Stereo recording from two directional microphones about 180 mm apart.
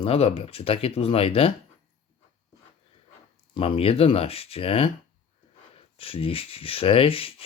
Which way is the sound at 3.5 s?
30° left (ahead or behind).